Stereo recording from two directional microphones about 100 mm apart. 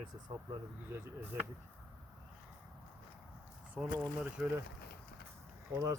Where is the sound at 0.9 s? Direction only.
20° right (ahead or behind).